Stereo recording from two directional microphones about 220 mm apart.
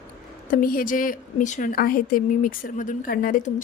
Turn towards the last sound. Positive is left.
turn(degrees=40)  # may be behind; listen again after turning